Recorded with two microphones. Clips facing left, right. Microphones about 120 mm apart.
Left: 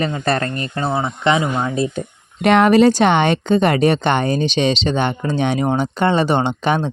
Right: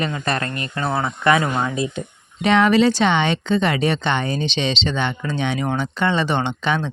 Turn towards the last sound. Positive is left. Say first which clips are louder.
# left 4 dB
turn(degrees=45)  # may be behind; listen again after turning